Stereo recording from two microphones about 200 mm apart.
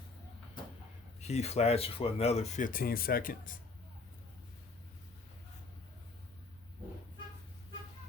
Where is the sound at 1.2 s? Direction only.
35° left (ahead or behind).